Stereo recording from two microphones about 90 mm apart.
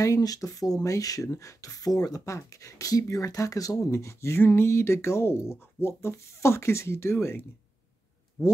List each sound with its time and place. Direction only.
0.0 s speech: 40° left (ahead or behind)
8.4 s speech: 35° left (ahead or behind)